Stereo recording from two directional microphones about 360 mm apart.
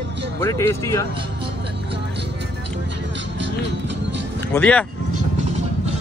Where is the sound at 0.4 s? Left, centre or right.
Centre.